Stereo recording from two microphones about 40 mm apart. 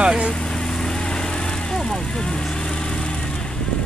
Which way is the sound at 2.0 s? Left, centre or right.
Centre.